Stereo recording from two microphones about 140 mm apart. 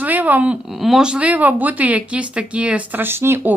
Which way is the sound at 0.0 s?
10° right (ahead or behind).